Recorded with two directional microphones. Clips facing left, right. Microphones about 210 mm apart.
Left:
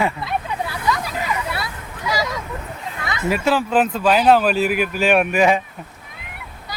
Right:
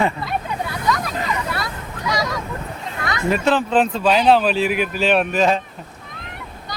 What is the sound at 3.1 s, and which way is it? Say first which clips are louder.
Speech: right 1 dB; 5° left (ahead or behind).